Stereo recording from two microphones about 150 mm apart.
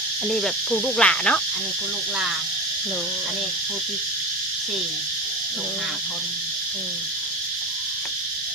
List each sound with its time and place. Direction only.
0.3 s cricket: 5° left (ahead or behind)